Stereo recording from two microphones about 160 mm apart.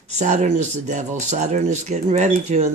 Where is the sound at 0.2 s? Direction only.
45° right (ahead or behind).